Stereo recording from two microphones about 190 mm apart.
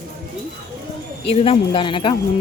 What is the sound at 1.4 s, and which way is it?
Speech, 30° left (ahead or behind).